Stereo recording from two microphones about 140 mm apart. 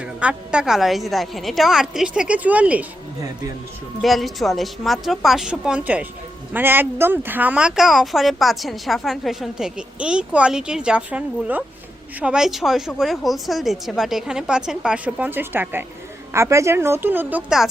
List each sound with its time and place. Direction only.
0.0 s speech: 10° right (ahead or behind)
4.0 s a woman's voice: centre (ahead or behind)